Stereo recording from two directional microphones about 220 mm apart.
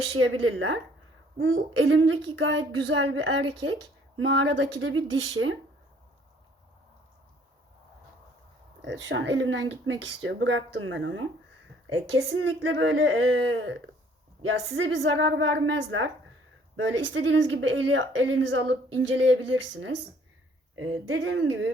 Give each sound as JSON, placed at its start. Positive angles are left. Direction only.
{"t": 0.2, "sound": "a woman's voice", "side_deg": -60}
{"t": 8.8, "sound": "speech", "side_deg": -55}
{"t": 21.1, "sound": "speech", "side_deg": -65}